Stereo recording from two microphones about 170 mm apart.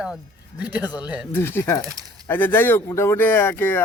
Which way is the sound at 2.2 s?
15° left (ahead or behind).